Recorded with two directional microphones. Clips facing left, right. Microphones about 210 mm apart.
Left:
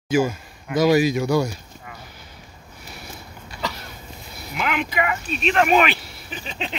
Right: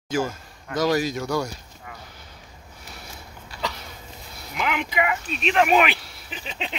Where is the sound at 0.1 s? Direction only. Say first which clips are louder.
Left 5 dB; 10° left (ahead or behind).